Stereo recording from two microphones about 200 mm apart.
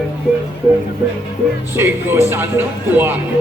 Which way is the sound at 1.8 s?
10° right (ahead or behind).